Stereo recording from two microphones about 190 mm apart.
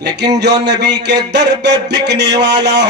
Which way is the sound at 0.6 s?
65° right (ahead or behind).